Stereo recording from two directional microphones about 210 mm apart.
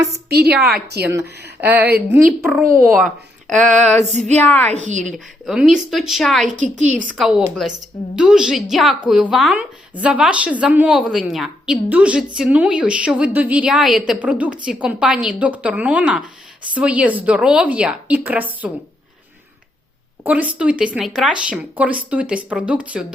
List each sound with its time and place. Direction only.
0.1 s a woman's voice: 50° right (ahead or behind)
1.8 s a woman's voice: 50° right (ahead or behind)
2.4 s a woman's voice: centre (ahead or behind)
3.7 s a sound: 35° right (ahead or behind)
4.4 s a woman's voice: 10° left (ahead or behind)
4.7 s a sound: 35° right (ahead or behind)
5.0 s a woman's voice: centre (ahead or behind)
6.6 s a sound: 35° right (ahead or behind)
7.1 s a woman's voice: 5° right (ahead or behind)
20.2 s speech: 5° right (ahead or behind)